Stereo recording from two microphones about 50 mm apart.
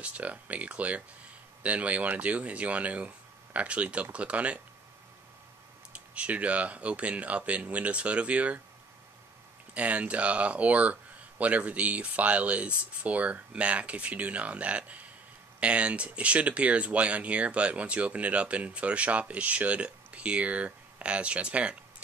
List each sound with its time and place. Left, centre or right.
0.0 s speech: right
5.9 s speech: right
9.8 s speech: right